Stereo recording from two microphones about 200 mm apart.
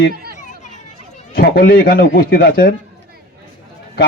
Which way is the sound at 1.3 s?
45° left (ahead or behind).